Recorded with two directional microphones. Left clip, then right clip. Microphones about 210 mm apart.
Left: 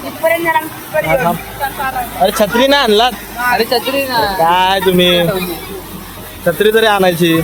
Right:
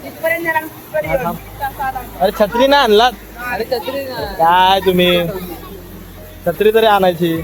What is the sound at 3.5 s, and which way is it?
Speech, 45° left (ahead or behind).